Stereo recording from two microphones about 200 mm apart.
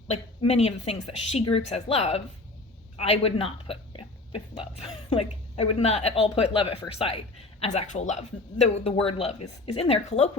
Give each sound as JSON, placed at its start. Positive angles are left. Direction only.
{"t": 0.1, "sound": "a woman's voice", "side_deg": 30}